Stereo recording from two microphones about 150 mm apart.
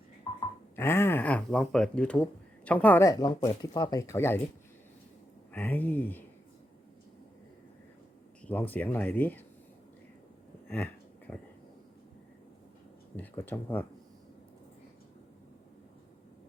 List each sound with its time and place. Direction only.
0.8 s speech: 15° left (ahead or behind)
3.1 s speech: 25° left (ahead or behind)
5.5 s speech: 10° left (ahead or behind)
8.4 s speech: 10° left (ahead or behind)
10.7 s a sound: 10° left (ahead or behind)
13.1 s speech: 15° left (ahead or behind)